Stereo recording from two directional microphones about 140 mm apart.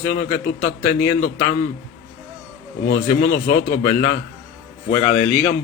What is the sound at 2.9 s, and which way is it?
A man's voice, 70° left (ahead or behind).